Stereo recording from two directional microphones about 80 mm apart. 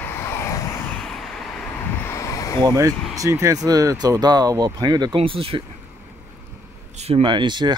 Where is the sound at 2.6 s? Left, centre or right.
Right.